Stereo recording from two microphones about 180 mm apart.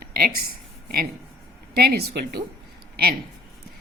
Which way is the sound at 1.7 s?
60° right (ahead or behind).